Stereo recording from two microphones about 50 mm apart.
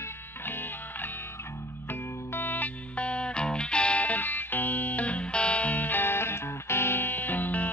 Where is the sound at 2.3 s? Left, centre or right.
Left.